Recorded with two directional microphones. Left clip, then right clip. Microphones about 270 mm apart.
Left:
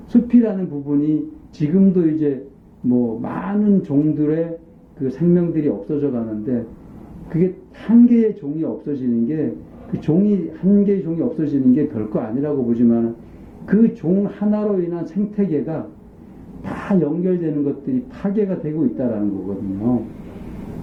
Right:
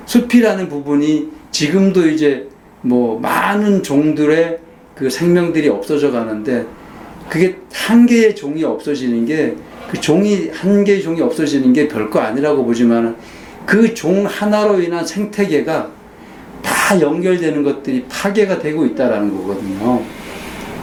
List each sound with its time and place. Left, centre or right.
0.1 s speech: centre
2.9 s speech: right
3.2 s speech: centre
19.8 s a sound: centre